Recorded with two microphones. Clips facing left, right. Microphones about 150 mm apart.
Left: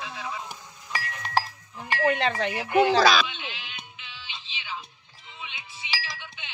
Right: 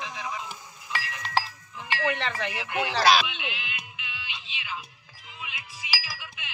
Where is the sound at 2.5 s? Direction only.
45° left (ahead or behind).